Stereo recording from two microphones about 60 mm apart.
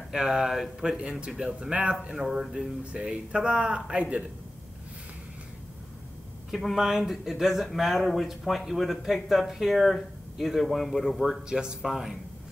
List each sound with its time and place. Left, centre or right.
0.1 s speech: centre
2.2 s speech: centre
2.8 s speech: centre
6.5 s speech: centre